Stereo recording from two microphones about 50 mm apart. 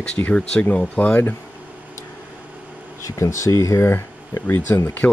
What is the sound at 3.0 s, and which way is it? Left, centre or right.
Speech, left.